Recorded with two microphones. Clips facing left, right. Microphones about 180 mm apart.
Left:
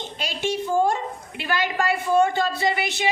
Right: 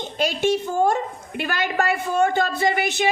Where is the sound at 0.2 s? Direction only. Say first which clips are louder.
Right 6 dB; 45° right (ahead or behind).